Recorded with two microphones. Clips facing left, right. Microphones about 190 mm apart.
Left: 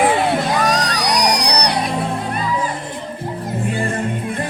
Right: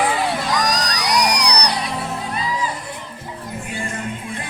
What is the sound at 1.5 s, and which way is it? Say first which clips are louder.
Music: left 2 dB; 55° left (ahead or behind).